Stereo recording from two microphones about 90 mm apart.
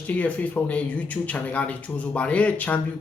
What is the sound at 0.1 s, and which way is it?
Speech, 15° left (ahead or behind).